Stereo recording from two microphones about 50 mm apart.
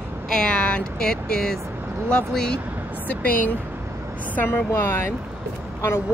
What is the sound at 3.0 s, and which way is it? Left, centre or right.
A woman's voice, left.